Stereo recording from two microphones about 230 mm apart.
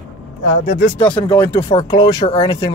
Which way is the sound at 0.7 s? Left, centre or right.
Left.